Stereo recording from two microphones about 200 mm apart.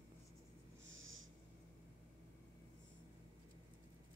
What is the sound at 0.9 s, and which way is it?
Snort, 75° right (ahead or behind).